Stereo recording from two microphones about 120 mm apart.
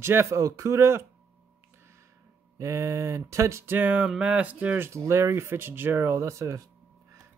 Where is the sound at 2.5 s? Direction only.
25° right (ahead or behind).